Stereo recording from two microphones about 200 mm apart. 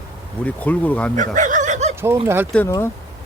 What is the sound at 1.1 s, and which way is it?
Chuckle, 40° right (ahead or behind).